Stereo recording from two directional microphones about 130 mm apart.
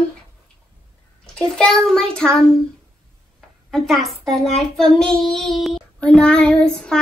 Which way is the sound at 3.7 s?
Centre (ahead or behind).